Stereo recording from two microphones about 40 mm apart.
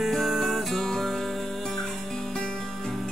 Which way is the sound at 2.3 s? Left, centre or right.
Centre.